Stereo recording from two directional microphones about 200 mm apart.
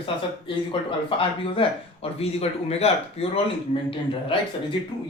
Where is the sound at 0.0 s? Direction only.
25° left (ahead or behind).